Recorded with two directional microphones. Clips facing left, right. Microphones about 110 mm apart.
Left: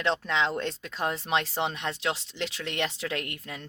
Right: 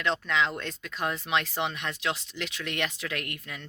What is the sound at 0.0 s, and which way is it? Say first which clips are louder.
Speech: left 1 dB; 30° left (ahead or behind).